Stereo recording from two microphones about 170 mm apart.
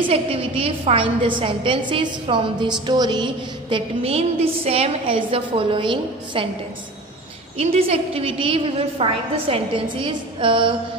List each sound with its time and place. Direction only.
0.0 s a woman's voice: 35° right (ahead or behind)
3.7 s a woman's voice: 35° right (ahead or behind)
7.5 s a woman's voice: 35° right (ahead or behind)